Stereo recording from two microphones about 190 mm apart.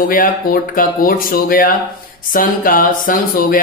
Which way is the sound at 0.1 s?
45° left (ahead or behind).